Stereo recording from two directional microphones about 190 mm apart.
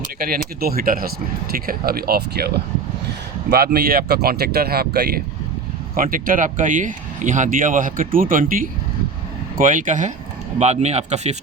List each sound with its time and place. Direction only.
0.3 s speech: 50° right (ahead or behind)
3.5 s speech: 55° right (ahead or behind); by 11.3 s 35° right (ahead or behind)